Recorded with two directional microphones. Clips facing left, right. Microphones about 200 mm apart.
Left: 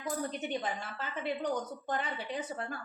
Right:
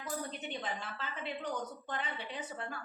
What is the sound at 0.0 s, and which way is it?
A woman's voice, 45° left (ahead or behind).